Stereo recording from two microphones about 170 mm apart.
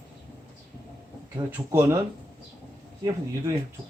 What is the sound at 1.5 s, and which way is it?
Speech, 15° right (ahead or behind).